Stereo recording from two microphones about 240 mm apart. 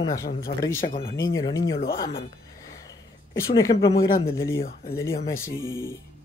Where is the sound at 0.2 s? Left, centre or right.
Left.